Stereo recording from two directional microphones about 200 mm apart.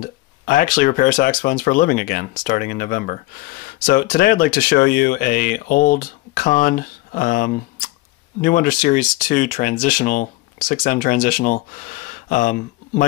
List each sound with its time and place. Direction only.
0.0 s speech: 45° left (ahead or behind)